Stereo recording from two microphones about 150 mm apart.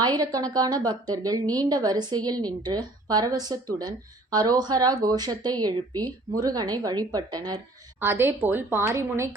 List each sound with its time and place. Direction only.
0.0 s a woman's voice: 25° right (ahead or behind)
7.9 s a woman's voice: 15° right (ahead or behind)